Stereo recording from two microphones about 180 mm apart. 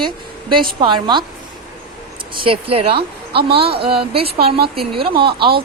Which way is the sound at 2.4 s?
30° right (ahead or behind).